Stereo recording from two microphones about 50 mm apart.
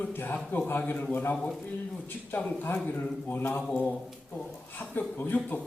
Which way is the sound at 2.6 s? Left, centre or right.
Left.